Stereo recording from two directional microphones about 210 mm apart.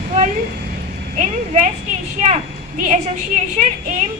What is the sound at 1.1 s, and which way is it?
A woman's voice, 35° right (ahead or behind).